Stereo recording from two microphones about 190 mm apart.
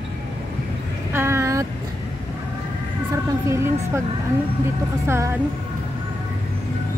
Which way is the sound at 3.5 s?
15° right (ahead or behind).